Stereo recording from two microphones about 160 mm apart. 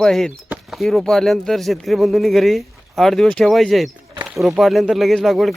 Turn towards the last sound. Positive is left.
turn(degrees=0)  # may be behind; listen again after turning